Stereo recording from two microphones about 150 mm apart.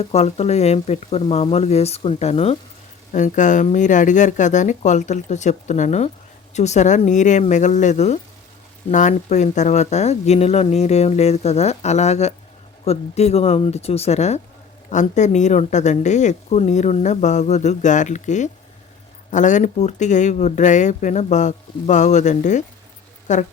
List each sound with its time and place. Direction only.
0.0 s a woman's voice: 45° left (ahead or behind)
3.1 s a woman's voice: 55° left (ahead or behind)